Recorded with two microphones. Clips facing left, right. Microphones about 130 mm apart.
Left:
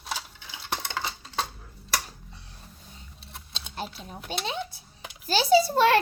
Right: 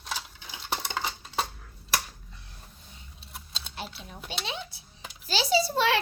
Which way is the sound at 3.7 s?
45° left (ahead or behind).